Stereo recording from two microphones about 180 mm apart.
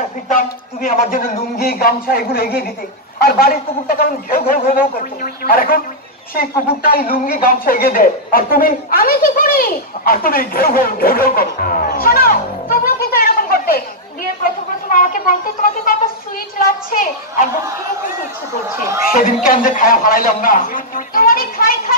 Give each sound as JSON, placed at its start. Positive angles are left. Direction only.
{"t": 0.8, "sound": "a man's voice", "side_deg": 50}
{"t": 19.1, "sound": "a man's voice", "side_deg": 50}